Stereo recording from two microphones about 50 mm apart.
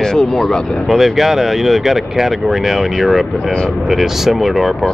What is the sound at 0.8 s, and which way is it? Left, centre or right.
Speech, centre.